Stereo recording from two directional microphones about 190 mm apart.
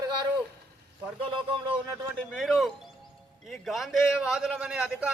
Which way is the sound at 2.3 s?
Centre (ahead or behind).